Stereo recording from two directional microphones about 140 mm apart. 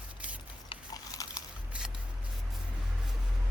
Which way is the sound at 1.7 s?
5° right (ahead or behind).